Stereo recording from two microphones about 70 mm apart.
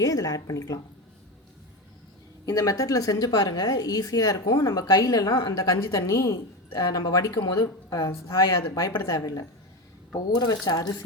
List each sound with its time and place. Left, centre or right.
0.0 s a woman's voice: left
2.5 s a woman's voice: left
6.0 s a woman's voice: left
6.8 s speech: left
7.9 s a woman's voice: left
10.3 s speech: left